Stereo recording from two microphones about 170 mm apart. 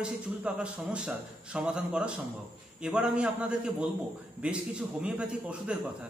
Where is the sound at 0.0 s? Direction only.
5° right (ahead or behind).